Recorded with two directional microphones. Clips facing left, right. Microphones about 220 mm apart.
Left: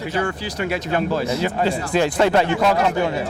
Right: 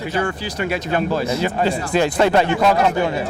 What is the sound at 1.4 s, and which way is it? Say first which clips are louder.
Speech: right 1 dB; 20° right (ahead or behind).